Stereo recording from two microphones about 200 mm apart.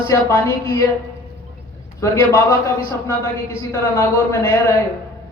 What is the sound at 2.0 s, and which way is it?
Speech, 15° left (ahead or behind).